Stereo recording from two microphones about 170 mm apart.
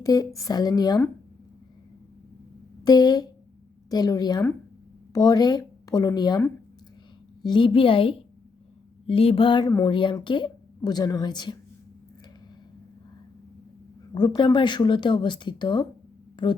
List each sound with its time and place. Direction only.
0.0 s a woman's voice: 20° left (ahead or behind)
2.8 s a woman's voice: 25° left (ahead or behind)
14.1 s speech: 25° left (ahead or behind)